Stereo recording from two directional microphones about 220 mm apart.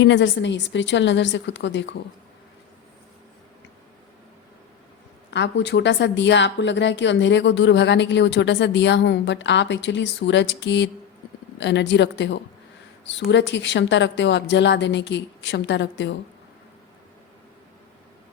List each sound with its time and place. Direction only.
0.0 s a woman's voice: 55° left (ahead or behind)
5.3 s a woman's voice: 55° left (ahead or behind)